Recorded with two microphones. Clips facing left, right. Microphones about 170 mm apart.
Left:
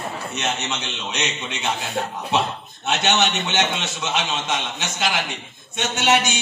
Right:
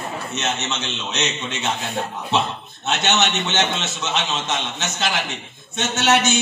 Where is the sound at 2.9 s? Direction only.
10° left (ahead or behind).